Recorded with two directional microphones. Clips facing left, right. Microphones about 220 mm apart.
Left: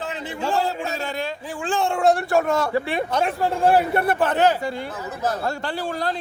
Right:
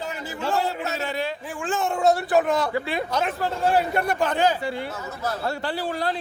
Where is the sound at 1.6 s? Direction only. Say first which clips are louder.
Left 3 dB; 30° left (ahead or behind).